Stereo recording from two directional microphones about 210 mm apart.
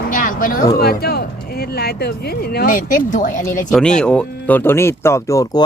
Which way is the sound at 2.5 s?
40° left (ahead or behind).